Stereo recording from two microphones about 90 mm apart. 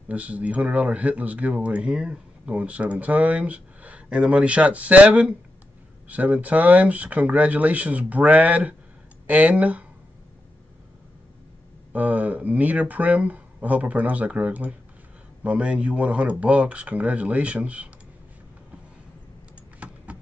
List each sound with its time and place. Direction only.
0.1 s speech: 15° right (ahead or behind)
11.9 s speech: 15° right (ahead or behind)